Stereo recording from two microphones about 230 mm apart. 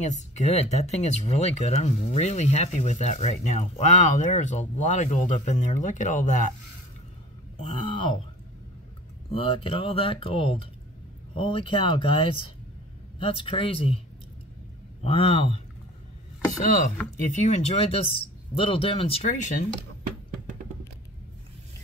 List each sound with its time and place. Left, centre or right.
0.0 s speech: left
7.6 s speech: left
9.3 s speech: left
13.2 s speech: left
17.2 s speech: left